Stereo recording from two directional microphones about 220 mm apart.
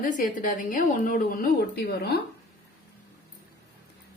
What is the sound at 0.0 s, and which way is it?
A woman's voice, 40° left (ahead or behind).